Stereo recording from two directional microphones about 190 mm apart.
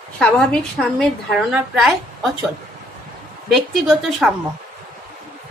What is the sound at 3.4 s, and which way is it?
Speech, centre (ahead or behind).